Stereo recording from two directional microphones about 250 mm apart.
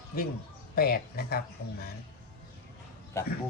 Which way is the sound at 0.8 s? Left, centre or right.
Left.